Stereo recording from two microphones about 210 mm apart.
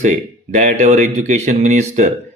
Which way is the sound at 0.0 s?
35° right (ahead or behind).